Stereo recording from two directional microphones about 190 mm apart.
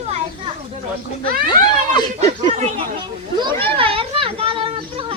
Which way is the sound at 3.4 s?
25° right (ahead or behind).